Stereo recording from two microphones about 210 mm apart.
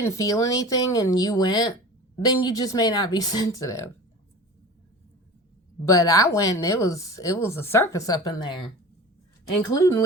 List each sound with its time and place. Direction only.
0.0 s speech: 15° left (ahead or behind)
5.8 s speech: 15° left (ahead or behind)